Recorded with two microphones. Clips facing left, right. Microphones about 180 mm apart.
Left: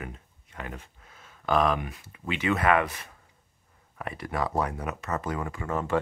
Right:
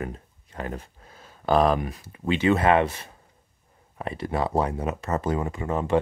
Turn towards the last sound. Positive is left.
turn(degrees=-20)  # may be behind; listen again after turning